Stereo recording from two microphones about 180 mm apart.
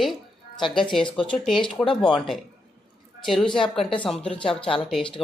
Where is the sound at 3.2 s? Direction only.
Centre (ahead or behind).